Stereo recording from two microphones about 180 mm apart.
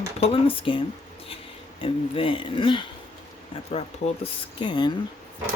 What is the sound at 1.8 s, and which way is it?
Speech, 30° left (ahead or behind).